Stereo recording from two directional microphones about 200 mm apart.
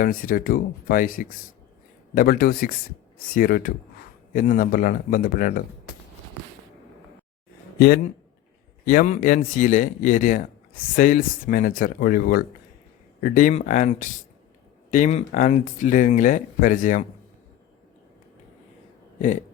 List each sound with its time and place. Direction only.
0.0 s speech: 45° left (ahead or behind)
8.9 s speech: 40° left (ahead or behind)